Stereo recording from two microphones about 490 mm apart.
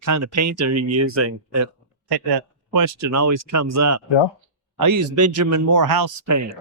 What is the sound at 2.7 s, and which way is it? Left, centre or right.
Speech, right.